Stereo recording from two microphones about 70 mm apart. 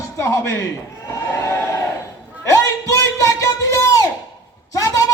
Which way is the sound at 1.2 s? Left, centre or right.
Left.